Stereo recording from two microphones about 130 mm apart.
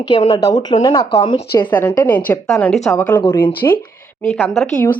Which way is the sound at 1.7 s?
20° left (ahead or behind).